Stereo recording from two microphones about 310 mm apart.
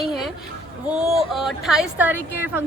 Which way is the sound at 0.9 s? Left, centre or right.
Centre.